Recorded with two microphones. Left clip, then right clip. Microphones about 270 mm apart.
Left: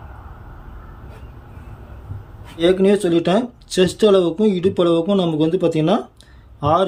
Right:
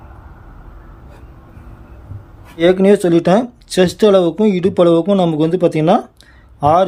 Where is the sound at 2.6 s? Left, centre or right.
Centre.